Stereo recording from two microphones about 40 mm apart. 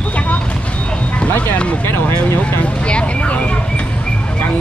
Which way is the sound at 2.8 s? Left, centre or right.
Left.